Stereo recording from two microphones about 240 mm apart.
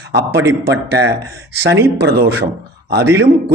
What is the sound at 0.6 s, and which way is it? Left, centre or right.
Speech, right.